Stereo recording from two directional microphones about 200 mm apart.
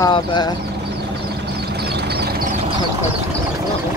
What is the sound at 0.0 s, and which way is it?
Speech, 20° left (ahead or behind).